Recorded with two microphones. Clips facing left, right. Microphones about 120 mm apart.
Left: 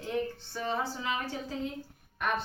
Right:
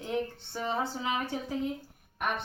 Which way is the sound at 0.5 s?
20° right (ahead or behind).